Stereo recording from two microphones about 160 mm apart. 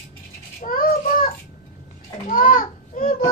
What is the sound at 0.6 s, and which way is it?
Child singing, 65° left (ahead or behind).